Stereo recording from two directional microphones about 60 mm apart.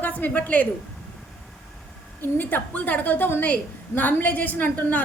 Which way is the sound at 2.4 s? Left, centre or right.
Left.